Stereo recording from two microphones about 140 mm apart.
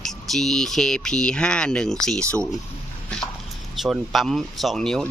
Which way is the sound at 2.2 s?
20° right (ahead or behind).